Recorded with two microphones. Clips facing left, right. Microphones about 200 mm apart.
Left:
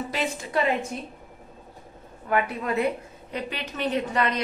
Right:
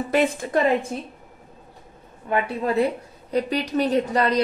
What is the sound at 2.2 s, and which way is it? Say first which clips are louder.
A woman's voice: right 2 dB; 25° right (ahead or behind).